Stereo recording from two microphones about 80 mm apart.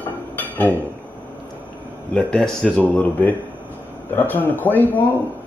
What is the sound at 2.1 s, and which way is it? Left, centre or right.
Speech, centre.